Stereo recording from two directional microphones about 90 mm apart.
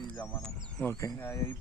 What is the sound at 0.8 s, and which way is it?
Speech, 25° left (ahead or behind).